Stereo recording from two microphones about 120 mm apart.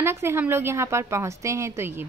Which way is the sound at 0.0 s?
20° right (ahead or behind).